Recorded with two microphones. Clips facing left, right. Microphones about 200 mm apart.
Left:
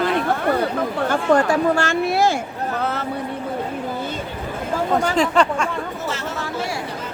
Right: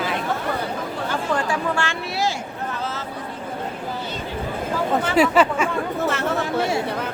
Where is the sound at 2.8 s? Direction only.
60° left (ahead or behind).